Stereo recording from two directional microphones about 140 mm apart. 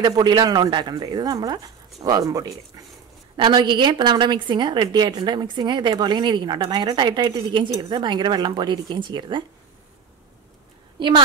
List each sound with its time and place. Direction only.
0.0 s a woman's voice: 30° right (ahead or behind)
11.0 s a woman's voice: 35° right (ahead or behind)